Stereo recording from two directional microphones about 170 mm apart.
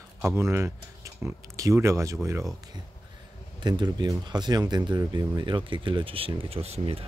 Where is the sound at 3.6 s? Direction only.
25° right (ahead or behind).